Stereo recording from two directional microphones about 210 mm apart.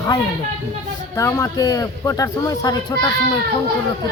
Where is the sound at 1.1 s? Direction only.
15° left (ahead or behind).